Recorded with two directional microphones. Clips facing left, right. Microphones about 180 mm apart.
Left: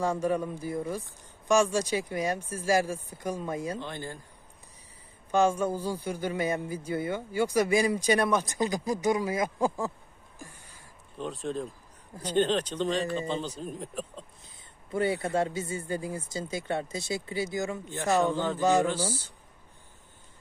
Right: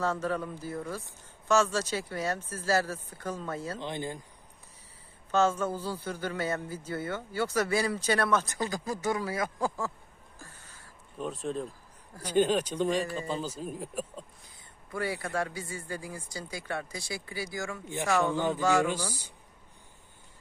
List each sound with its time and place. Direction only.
0.0 s a man's voice: 15° left (ahead or behind)
3.8 s speech: 20° right (ahead or behind)
5.3 s a man's voice: 15° left (ahead or behind)
10.3 s a sound: 15° left (ahead or behind)
11.4 s a man's voice: centre (ahead or behind)
14.4 s a man's voice: 25° left (ahead or behind)
18.3 s speech: 15° right (ahead or behind)
18.6 s a man's voice: 20° left (ahead or behind)